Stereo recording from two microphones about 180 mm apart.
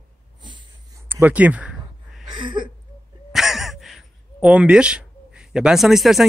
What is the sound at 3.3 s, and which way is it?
A man's voice, centre (ahead or behind).